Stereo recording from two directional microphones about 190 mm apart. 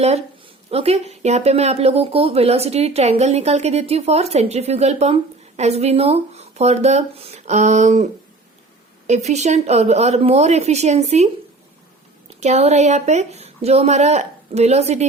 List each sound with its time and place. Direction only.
0.7 s speech: 30° right (ahead or behind)
12.4 s speech: 35° right (ahead or behind)